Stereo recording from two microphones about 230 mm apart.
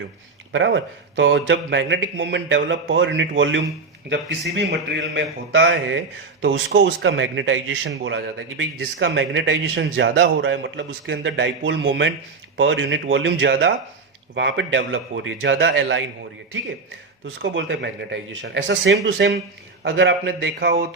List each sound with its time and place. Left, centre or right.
0.5 s a man's voice: right
17.4 s a man's voice: right